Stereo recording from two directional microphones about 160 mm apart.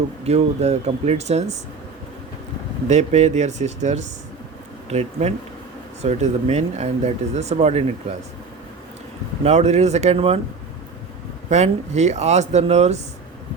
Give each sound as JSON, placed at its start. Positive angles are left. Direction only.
{"t": 0.3, "sound": "speech", "side_deg": -40}
{"t": 2.8, "sound": "speech", "side_deg": -45}
{"t": 9.4, "sound": "speech", "side_deg": -45}
{"t": 11.4, "sound": "speech", "side_deg": -45}